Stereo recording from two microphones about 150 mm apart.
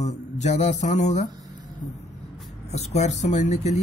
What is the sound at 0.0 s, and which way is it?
Speech, 50° left (ahead or behind).